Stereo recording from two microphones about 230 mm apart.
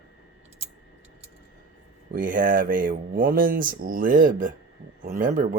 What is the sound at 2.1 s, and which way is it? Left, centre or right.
Speech, right.